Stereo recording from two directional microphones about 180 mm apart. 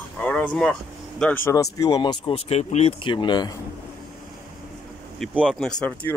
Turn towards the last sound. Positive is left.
turn(degrees=5)  # may be behind; listen again after turning